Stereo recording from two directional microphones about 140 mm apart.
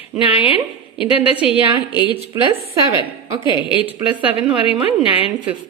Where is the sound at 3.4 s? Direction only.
35° left (ahead or behind).